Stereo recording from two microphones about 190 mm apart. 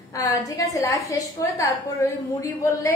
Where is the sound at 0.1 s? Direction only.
15° left (ahead or behind).